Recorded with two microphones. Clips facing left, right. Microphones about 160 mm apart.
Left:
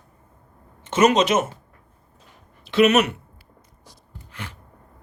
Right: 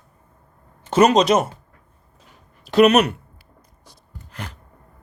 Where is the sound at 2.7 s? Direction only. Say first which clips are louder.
Right 3 dB; 40° right (ahead or behind).